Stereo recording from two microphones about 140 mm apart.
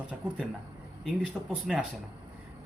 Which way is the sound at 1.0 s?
Centre (ahead or behind).